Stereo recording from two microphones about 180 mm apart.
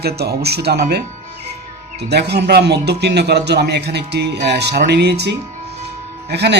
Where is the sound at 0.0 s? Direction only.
60° right (ahead or behind).